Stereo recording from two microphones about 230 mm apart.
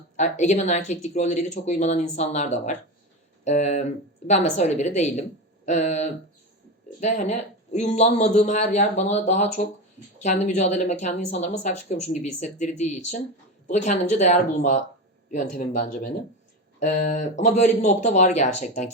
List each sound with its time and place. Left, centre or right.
0.2 s speech: left